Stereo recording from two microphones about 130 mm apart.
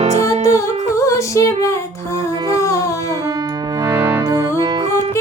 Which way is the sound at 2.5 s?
25° left (ahead or behind).